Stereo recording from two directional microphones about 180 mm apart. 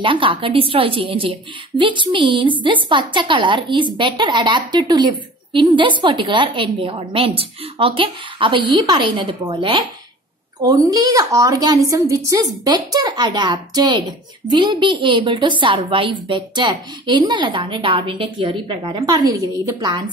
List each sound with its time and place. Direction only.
0.0 s a woman's voice: 30° right (ahead or behind)